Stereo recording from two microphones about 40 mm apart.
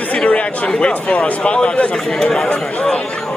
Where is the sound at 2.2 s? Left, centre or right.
Centre.